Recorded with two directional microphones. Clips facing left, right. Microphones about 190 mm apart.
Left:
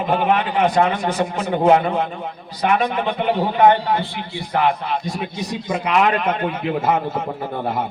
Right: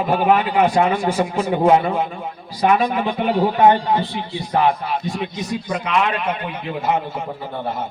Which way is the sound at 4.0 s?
15° left (ahead or behind).